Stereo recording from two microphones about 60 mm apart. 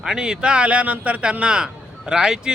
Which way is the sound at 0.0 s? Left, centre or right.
Centre.